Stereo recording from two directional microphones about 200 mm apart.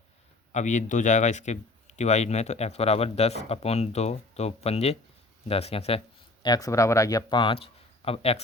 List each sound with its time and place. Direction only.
0.5 s speech: 35° left (ahead or behind)
6.4 s speech: 20° left (ahead or behind)